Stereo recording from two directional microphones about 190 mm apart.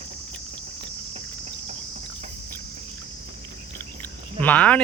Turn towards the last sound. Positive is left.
turn(degrees=10)  # may be behind; listen again after turning